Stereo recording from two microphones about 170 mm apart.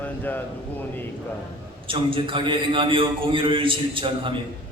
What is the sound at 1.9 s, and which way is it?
A man's voice, 30° right (ahead or behind).